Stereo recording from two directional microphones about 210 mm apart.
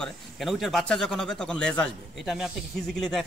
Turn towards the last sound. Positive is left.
turn(degrees=0)  # may be behind; listen again after turning